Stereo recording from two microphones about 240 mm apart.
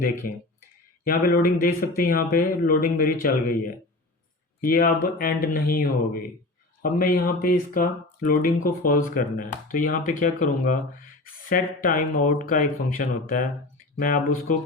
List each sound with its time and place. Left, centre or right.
0.2 s speech: left
4.6 s speech: left